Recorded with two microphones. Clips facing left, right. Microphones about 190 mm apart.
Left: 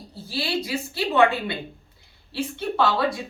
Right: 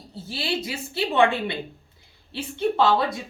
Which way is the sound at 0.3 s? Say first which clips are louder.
Left 2 dB; 25° right (ahead or behind).